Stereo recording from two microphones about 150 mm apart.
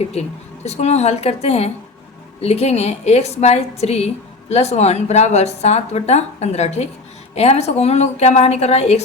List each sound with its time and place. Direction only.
0.1 s a woman's voice: 45° left (ahead or behind)